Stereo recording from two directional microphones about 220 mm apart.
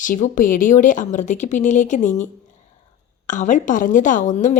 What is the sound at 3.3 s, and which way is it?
A woman's voice, 35° left (ahead or behind).